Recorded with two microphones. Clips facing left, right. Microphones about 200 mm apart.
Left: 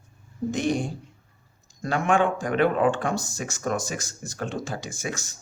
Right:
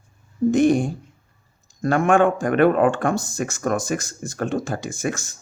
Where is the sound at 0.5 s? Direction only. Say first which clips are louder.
Right 8 dB; 50° right (ahead or behind).